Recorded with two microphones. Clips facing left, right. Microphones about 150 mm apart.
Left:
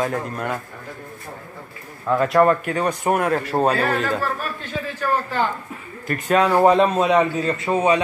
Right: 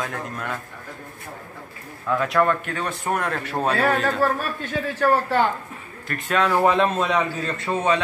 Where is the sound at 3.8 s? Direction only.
60° right (ahead or behind).